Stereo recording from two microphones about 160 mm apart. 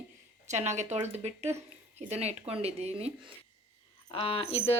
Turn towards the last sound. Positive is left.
turn(degrees=35)  # may be behind; listen again after turning